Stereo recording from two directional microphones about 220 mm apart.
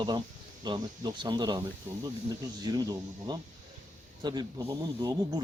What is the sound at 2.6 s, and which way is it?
A man's voice, 15° right (ahead or behind).